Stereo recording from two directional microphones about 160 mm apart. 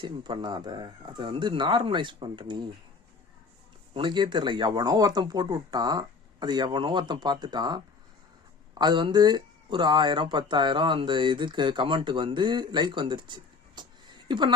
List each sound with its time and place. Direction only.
0.0 s speech: 30° right (ahead or behind)
3.9 s speech: 30° right (ahead or behind)
8.8 s speech: 30° right (ahead or behind)